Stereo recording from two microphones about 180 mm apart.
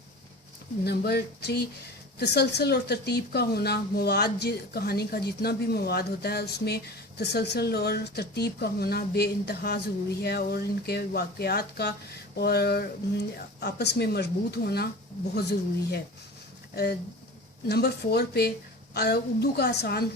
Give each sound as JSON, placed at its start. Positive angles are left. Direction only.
{"t": 0.9, "sound": "speech", "side_deg": 65}
{"t": 16.7, "sound": "speech", "side_deg": 65}